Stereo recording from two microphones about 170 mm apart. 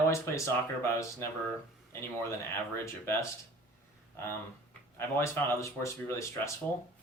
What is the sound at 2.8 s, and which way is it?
Speech, 15° left (ahead or behind).